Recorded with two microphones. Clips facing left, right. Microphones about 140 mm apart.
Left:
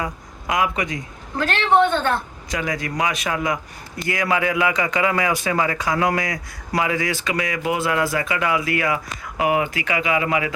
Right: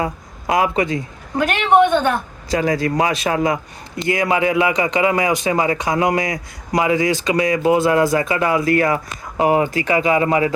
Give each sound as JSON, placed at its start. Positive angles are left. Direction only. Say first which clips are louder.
{"t": 0.0, "sound": "speech", "louder": "right 5 dB", "side_deg": -30}
{"t": 1.4, "sound": "a woman's voice", "louder": "right 3 dB", "side_deg": -15}
{"t": 2.5, "sound": "speech", "louder": "right 8 dB", "side_deg": -35}